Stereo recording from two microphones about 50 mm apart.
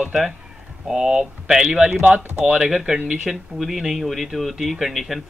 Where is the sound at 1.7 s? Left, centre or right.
Right.